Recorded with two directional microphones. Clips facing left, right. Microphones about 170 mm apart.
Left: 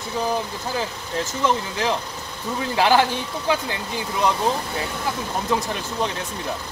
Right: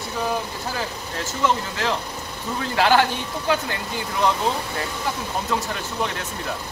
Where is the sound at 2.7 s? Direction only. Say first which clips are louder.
Even; 15° left (ahead or behind).